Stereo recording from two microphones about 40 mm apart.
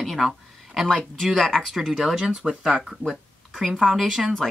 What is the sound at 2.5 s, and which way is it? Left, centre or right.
Speech, right.